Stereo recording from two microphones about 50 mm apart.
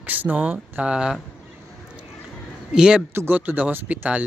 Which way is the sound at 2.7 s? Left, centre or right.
Centre.